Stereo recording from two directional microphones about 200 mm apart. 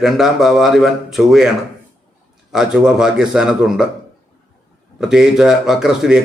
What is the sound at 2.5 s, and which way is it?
A man's voice, 5° right (ahead or behind).